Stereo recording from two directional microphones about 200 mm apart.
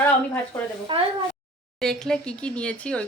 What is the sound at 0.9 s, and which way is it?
Speech, 25° right (ahead or behind).